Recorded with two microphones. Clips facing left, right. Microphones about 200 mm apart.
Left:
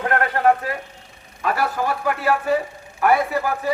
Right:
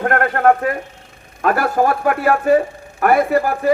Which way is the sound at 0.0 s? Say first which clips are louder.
Right 4 dB; 50° right (ahead or behind).